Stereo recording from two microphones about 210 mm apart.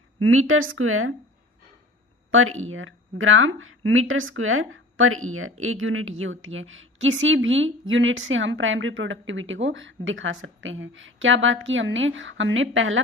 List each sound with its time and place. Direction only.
0.2 s speech: 75° right (ahead or behind)
2.3 s speech: 75° right (ahead or behind)